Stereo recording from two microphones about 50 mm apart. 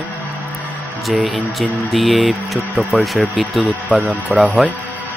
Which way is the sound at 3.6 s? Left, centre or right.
Right.